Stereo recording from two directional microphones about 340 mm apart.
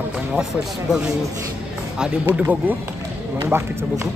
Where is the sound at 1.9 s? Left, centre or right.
Centre.